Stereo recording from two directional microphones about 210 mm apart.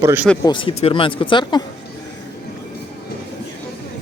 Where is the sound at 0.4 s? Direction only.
25° left (ahead or behind).